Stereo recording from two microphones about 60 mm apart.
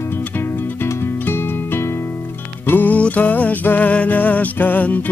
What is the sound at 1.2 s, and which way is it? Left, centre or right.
Music, left.